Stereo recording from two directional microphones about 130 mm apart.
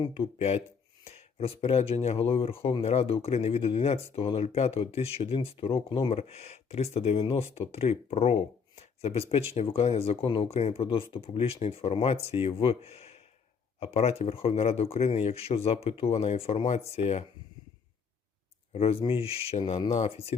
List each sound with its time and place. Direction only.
0.0 s speech: 45° left (ahead or behind)
6.1 s speech: 55° left (ahead or behind)
18.7 s speech: 50° left (ahead or behind)